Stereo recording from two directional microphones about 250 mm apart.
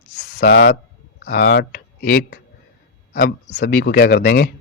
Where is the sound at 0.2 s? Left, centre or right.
Left.